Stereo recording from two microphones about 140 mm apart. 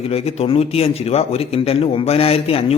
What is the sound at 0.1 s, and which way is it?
A man's voice, 45° left (ahead or behind).